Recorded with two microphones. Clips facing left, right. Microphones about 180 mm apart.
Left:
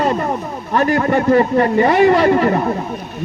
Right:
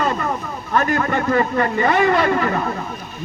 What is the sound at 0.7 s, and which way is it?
A man's voice, 35° left (ahead or behind).